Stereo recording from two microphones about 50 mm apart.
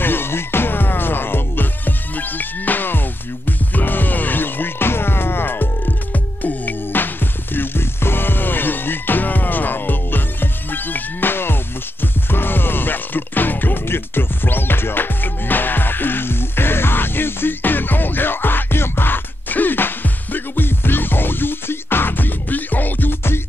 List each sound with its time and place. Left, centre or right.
0.0 s music: left